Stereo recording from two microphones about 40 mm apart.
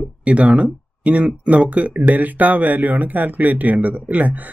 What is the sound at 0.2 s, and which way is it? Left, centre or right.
Speech, right.